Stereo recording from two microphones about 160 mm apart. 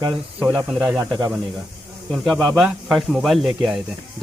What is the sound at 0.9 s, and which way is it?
Speech, 20° right (ahead or behind).